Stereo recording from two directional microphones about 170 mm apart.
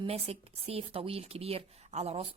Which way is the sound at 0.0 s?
35° right (ahead or behind).